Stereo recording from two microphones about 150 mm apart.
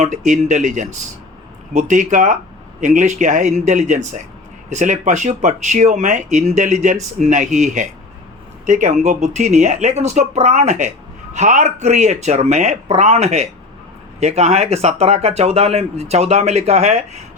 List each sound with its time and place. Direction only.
0.0 s speech: 55° right (ahead or behind)